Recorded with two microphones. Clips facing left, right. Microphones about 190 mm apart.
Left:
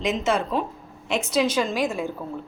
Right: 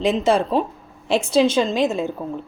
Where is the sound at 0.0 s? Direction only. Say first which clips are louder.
Right 6 dB; 30° right (ahead or behind).